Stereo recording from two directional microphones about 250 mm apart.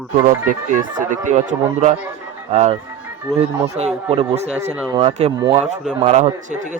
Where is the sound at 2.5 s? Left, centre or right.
Right.